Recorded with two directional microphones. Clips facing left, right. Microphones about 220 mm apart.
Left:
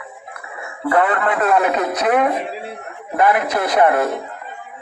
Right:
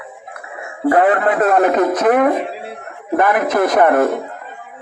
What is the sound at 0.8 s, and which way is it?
A man's voice, 40° right (ahead or behind).